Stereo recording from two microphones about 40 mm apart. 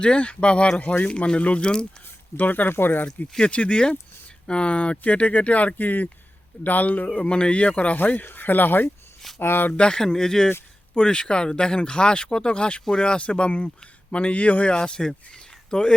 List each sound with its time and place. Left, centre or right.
0.0 s speech: left
2.3 s speech: left
3.4 s speech: left
5.7 s speech: left
7.3 s speech: left
7.9 s speech: left
9.7 s speech: left
14.7 s speech: left